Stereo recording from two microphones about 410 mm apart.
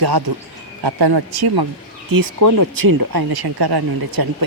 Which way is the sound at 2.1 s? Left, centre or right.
Right.